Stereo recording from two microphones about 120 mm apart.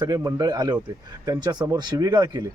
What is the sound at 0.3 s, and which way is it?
A man's voice, 30° right (ahead or behind).